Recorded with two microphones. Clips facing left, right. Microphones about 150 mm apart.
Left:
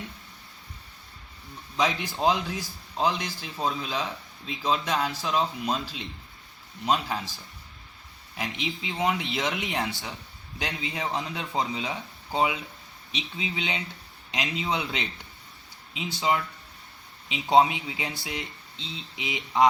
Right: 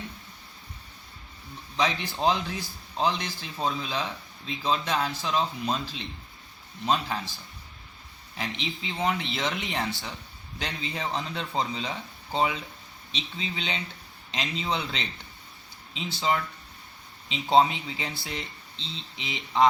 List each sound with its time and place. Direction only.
1.7 s a man's voice: 5° left (ahead or behind)
8.4 s a man's voice: 5° left (ahead or behind)